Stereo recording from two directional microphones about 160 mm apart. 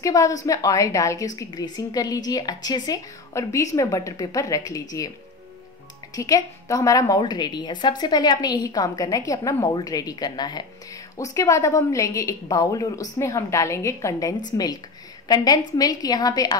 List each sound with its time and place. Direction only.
0.0 s a woman's voice: 20° left (ahead or behind)
6.1 s a woman's voice: 20° left (ahead or behind)